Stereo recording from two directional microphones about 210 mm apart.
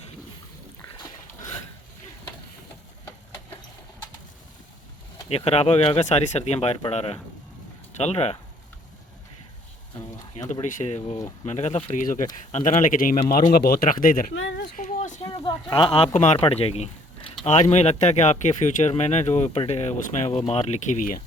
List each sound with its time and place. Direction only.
5.3 s speech: 30° left (ahead or behind)
10.5 s speech: 35° left (ahead or behind)
14.3 s a sound: 55° left (ahead or behind)
14.8 s speech: 35° left (ahead or behind)